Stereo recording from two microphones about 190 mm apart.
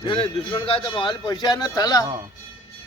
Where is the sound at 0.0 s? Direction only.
25° left (ahead or behind).